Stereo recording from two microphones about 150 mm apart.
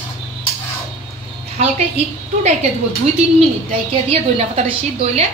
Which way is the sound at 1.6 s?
45° right (ahead or behind).